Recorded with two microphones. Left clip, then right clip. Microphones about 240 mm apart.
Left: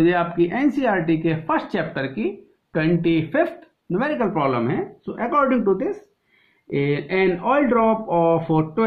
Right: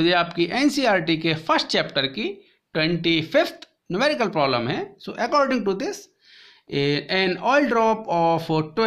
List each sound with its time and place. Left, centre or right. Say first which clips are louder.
0.0 s speech: left 1 dB; right